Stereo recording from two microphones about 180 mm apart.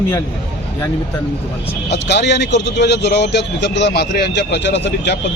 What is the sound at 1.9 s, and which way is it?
Speech, 70° left (ahead or behind).